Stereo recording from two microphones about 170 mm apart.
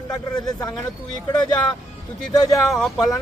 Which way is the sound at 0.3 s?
25° left (ahead or behind).